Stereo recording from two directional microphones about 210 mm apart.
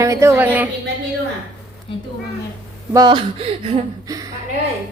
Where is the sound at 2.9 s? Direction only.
20° right (ahead or behind).